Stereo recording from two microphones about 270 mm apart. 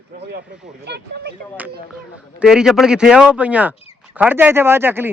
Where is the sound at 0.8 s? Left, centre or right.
Right.